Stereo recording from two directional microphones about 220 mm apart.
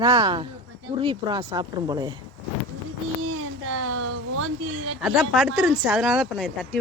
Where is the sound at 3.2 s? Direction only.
75° right (ahead or behind).